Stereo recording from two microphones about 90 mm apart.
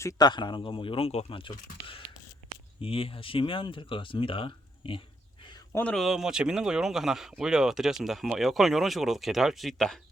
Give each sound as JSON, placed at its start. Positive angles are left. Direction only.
{"t": 0.2, "sound": "speech", "side_deg": 55}
{"t": 2.8, "sound": "speech", "side_deg": 90}
{"t": 6.0, "sound": "speech", "side_deg": -5}